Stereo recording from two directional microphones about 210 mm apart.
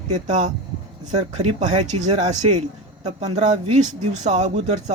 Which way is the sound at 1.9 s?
35° right (ahead or behind).